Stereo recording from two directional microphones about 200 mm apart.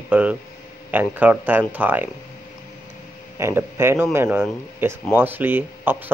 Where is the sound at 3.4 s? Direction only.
10° right (ahead or behind).